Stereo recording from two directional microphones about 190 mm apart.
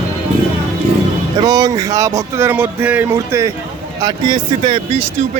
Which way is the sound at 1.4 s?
20° right (ahead or behind).